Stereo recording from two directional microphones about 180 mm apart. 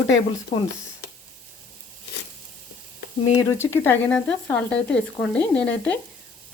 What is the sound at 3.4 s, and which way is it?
Speech, 15° left (ahead or behind).